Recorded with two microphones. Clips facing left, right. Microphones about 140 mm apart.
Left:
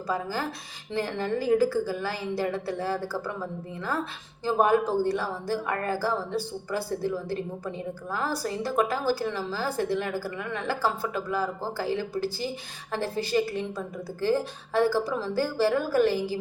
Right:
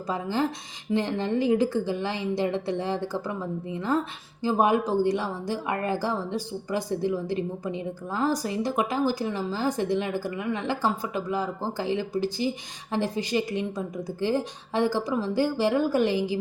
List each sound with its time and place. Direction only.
0.1 s a woman's voice: 20° right (ahead or behind)